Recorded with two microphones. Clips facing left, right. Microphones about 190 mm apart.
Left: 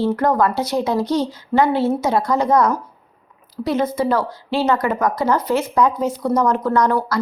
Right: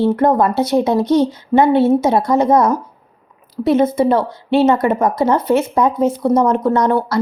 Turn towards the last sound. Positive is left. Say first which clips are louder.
# right 3 dB
turn(degrees=-25)  # may be behind; listen again after turning